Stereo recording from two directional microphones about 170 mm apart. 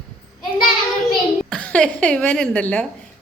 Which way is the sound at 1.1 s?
5° left (ahead or behind).